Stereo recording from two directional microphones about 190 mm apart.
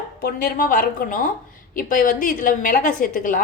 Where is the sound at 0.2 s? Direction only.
50° left (ahead or behind).